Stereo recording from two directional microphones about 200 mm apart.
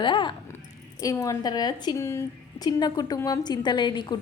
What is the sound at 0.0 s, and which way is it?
A woman's voice, 25° left (ahead or behind).